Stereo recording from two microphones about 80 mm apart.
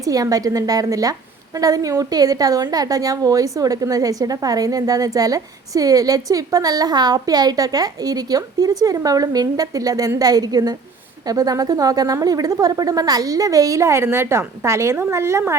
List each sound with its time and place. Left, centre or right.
0.0 s a woman's voice: right